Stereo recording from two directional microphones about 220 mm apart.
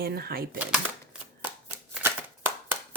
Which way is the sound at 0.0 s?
45° right (ahead or behind).